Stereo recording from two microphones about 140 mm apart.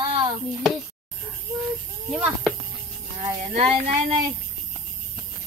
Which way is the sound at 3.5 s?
45° right (ahead or behind).